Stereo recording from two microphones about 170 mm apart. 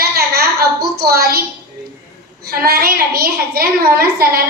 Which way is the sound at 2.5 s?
60° right (ahead or behind).